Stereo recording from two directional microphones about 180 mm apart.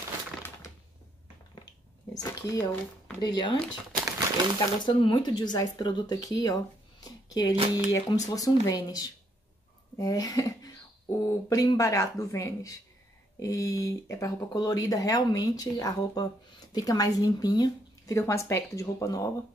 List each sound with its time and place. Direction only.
2.1 s speech: 20° left (ahead or behind)
4.6 s speech: 25° left (ahead or behind)